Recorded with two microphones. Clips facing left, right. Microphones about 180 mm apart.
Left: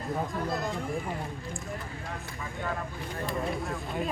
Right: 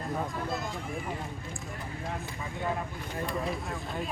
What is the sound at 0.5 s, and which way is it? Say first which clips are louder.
Speech: left 3 dB; centre (ahead or behind).